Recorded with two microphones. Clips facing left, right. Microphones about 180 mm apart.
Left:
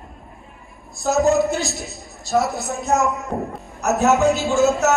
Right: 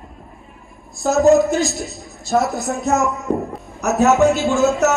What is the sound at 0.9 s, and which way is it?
A man's voice, centre (ahead or behind).